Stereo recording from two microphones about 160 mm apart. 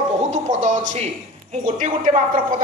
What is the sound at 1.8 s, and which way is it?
Speech, 55° right (ahead or behind).